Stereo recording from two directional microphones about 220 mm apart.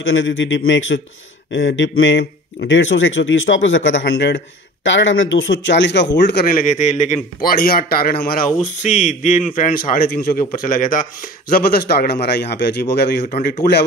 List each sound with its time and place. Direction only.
0.0 s a man's voice: 60° left (ahead or behind); by 7.2 s 30° left (ahead or behind)
7.4 s a man's voice: 40° left (ahead or behind)